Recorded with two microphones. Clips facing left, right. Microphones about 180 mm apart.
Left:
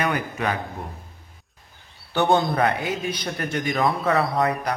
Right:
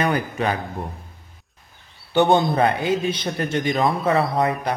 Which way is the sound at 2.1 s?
20° right (ahead or behind).